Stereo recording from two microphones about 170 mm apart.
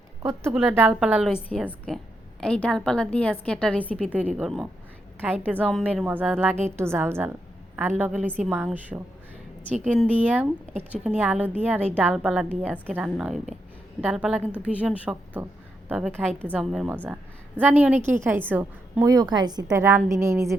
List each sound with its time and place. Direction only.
0.2 s a woman's voice: 15° right (ahead or behind)
1.5 s a woman's voice: 10° left (ahead or behind)
4.0 s a woman's voice: 10° right (ahead or behind)
10.1 s a woman's voice: 10° right (ahead or behind)
10.7 s a woman's voice: 40° right (ahead or behind)
11.0 s a woman's voice: 10° right (ahead or behind)
12.6 s a woman's voice: 10° left (ahead or behind)
12.9 s a woman's voice: 5° right (ahead or behind)
16.1 s a woman's voice: 5° left (ahead or behind); by 19.1 s 10° right (ahead or behind)
19.1 s a woman's voice: 25° right (ahead or behind)
19.7 s a woman's voice: 15° right (ahead or behind)